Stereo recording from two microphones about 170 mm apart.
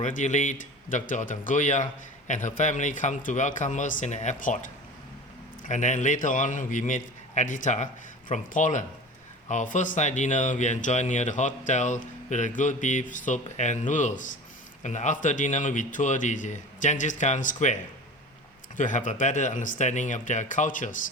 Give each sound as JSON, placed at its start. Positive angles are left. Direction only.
{"t": 0.0, "sound": "speech", "side_deg": 45}
{"t": 5.6, "sound": "speech", "side_deg": 45}
{"t": 18.8, "sound": "speech", "side_deg": 50}